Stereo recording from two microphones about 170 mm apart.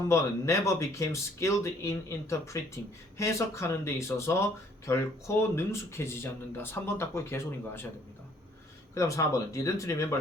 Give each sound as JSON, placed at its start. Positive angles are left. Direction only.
{"t": 0.1, "sound": "speech", "side_deg": 15}
{"t": 9.0, "sound": "speech", "side_deg": 20}